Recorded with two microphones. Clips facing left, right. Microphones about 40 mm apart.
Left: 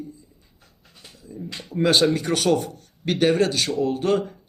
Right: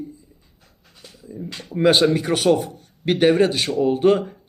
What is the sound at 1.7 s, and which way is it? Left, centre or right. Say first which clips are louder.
A man's voice: right 3 dB; centre.